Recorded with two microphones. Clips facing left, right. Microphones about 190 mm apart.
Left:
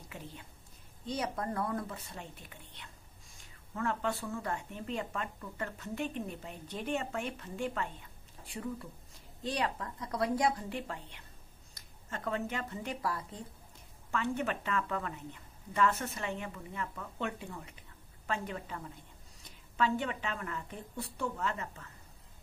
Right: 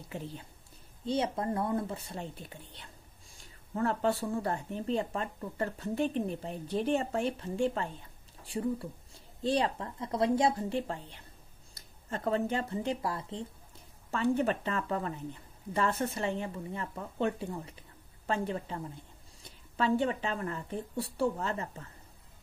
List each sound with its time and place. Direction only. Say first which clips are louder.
1.0 s speech: right 5 dB; 25° right (ahead or behind)
9.4 s a woman's voice: right 5 dB; 30° right (ahead or behind)
19.8 s speech: right 4 dB; 35° right (ahead or behind)